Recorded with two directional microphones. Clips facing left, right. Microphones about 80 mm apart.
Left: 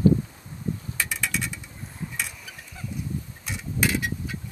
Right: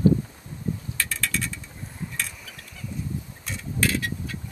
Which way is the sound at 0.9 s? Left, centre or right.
Centre.